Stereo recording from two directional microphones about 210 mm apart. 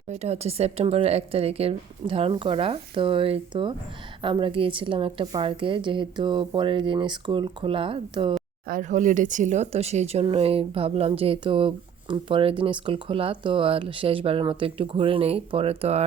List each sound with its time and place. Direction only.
0.1 s speech: 30° right (ahead or behind)
8.6 s speech: 40° right (ahead or behind)